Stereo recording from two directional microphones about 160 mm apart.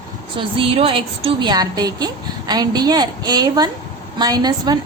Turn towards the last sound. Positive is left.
turn(degrees=-25)  # may be behind; listen again after turning